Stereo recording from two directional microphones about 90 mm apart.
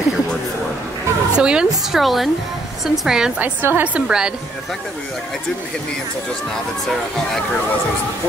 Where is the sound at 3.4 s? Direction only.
20° right (ahead or behind).